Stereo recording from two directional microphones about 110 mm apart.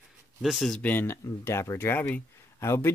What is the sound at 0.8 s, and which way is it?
Speech, 15° left (ahead or behind).